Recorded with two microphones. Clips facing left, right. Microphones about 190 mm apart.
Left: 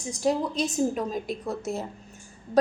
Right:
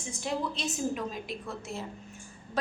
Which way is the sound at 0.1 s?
40° left (ahead or behind).